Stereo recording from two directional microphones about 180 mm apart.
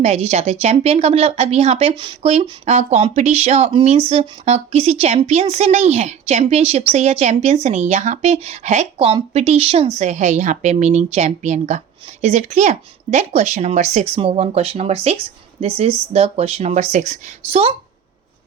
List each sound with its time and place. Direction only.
0.0 s a woman's voice: 35° right (ahead or behind)